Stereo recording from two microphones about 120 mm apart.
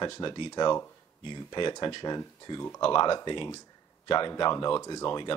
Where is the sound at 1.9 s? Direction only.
40° left (ahead or behind).